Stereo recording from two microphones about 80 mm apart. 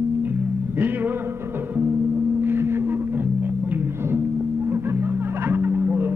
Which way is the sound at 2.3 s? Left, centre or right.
Right.